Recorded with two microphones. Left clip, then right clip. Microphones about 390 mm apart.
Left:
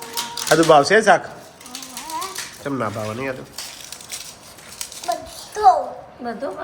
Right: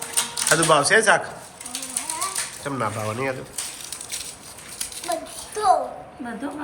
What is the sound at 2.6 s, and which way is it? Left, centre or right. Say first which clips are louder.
Speech: left 2 dB; centre.